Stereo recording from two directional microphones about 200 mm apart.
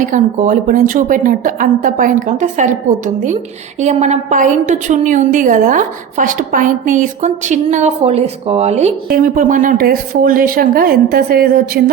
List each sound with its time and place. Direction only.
0.0 s a woman's voice: 40° right (ahead or behind)
3.8 s a woman's voice: 35° right (ahead or behind)
9.0 s speech: 45° right (ahead or behind)